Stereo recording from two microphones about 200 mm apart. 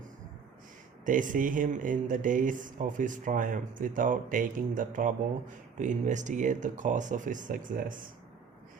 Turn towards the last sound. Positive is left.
turn(degrees=-40)  # may be behind; listen again after turning